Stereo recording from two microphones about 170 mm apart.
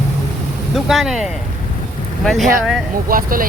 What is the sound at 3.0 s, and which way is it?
Speech, 55° right (ahead or behind).